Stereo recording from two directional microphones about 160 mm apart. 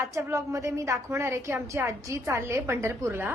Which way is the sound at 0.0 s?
15° right (ahead or behind).